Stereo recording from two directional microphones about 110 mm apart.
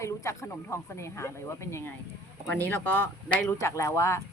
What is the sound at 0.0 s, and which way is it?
Speech, 25° left (ahead or behind).